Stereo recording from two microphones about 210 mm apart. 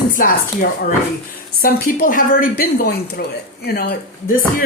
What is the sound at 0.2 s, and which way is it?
A woman's voice, 45° left (ahead or behind).